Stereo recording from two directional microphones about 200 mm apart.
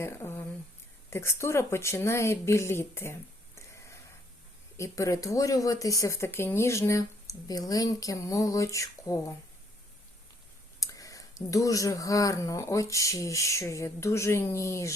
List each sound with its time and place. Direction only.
0.0 s a sound: 10° left (ahead or behind)
1.1 s speech: 15° left (ahead or behind)
10.8 s speech: 15° left (ahead or behind)